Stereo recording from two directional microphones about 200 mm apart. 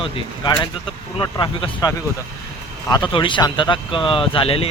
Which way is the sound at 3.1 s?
25° left (ahead or behind).